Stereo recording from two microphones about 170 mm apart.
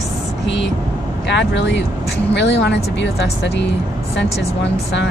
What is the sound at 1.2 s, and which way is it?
Speech, 90° left.